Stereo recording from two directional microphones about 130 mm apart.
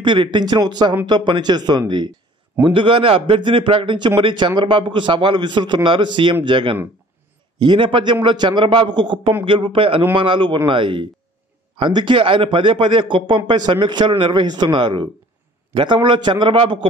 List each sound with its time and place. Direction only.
0.0 s a man's voice: 35° right (ahead or behind)